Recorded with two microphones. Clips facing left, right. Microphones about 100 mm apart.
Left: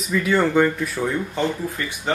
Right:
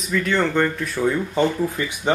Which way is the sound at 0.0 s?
5° left (ahead or behind).